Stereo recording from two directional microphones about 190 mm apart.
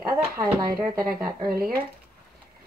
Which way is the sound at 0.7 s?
20° right (ahead or behind).